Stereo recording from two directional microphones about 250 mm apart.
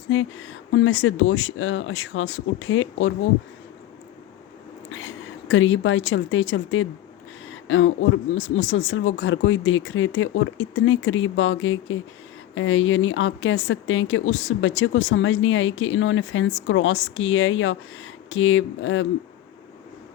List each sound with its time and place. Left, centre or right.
0.1 s speech: left
4.9 s speech: left